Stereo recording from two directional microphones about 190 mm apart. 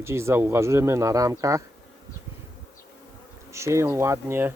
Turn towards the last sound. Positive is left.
turn(degrees=-10)  # may be behind; listen again after turning